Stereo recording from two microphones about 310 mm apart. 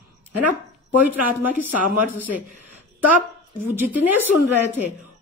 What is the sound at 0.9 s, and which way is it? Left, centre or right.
Speech, centre.